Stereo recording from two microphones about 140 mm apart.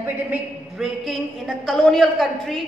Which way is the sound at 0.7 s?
Centre (ahead or behind).